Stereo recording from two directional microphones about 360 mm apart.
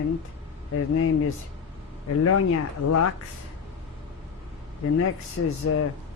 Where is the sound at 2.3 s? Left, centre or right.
Left.